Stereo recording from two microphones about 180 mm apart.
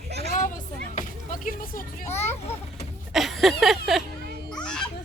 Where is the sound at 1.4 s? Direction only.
50° left (ahead or behind).